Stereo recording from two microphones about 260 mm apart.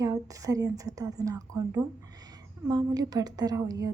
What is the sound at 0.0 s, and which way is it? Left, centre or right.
A woman's voice, centre.